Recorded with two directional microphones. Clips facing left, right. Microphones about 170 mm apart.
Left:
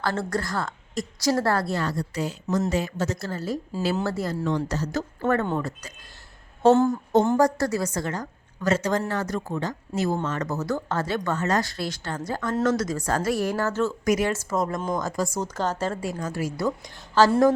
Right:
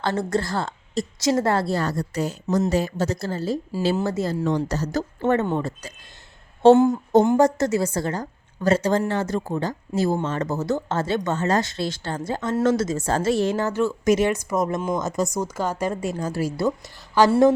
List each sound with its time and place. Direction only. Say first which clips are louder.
0.0 s a woman's voice: right 3 dB; 20° right (ahead or behind)
4.4 s speech: right 3 dB; 40° right (ahead or behind)
5.2 s a woman's voice: right 3 dB; 20° right (ahead or behind)
17.2 s speech: right 2 dB; 15° right (ahead or behind)